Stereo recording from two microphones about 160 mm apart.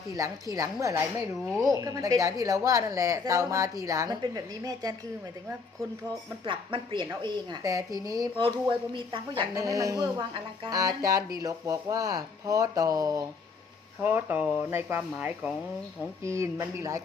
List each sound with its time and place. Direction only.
0.5 s a woman's voice: 20° right (ahead or behind)
6.4 s a woman's voice: 30° right (ahead or behind)
14.0 s speech: 10° right (ahead or behind)